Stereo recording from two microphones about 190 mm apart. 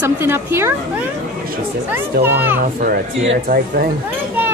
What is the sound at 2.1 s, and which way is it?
Speech, 55° right (ahead or behind).